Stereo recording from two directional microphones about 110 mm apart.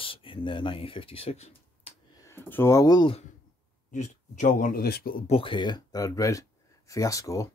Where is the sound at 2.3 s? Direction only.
20° left (ahead or behind).